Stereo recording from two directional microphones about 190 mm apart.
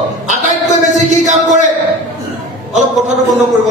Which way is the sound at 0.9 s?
40° right (ahead or behind).